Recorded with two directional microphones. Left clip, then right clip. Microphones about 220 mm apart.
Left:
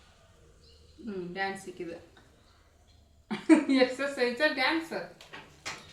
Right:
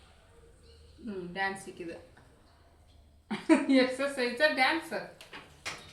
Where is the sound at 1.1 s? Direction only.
10° left (ahead or behind).